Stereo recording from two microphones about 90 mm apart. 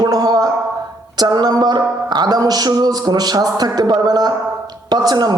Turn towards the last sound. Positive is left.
turn(degrees=-50)  # may be behind; listen again after turning